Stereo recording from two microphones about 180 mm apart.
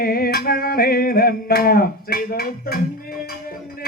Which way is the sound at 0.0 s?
55° left (ahead or behind).